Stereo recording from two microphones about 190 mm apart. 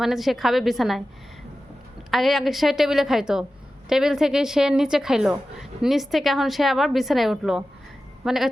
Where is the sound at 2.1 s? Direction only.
Centre (ahead or behind).